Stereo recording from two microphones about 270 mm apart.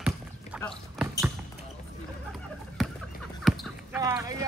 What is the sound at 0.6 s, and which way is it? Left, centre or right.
Basketball bounce, centre.